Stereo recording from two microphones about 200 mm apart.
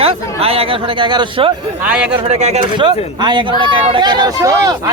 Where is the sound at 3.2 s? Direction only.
25° right (ahead or behind).